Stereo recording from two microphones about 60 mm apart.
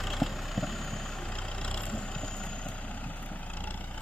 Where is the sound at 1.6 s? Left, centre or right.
Centre.